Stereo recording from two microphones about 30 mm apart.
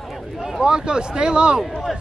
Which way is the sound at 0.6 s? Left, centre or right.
Right.